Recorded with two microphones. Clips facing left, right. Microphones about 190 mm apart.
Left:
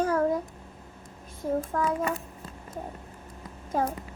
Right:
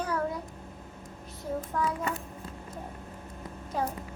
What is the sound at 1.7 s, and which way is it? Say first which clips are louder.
Speech: right 1 dB; 45° left (ahead or behind).